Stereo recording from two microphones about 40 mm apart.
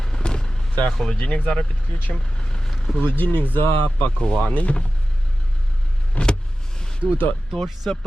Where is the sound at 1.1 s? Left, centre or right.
Left.